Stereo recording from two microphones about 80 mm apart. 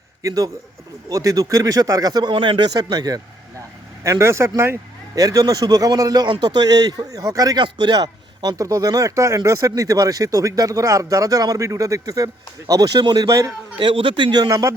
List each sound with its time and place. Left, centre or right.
0.2 s a man's voice: right
2.6 s speech: right
4.0 s speech: right
5.1 s a man's voice: right
7.6 s a man's voice: right
13.2 s speech: right
13.7 s a man's voice: right
14.5 s speech: right